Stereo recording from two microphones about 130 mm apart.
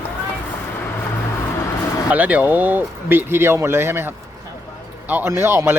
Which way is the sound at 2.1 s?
10° right (ahead or behind).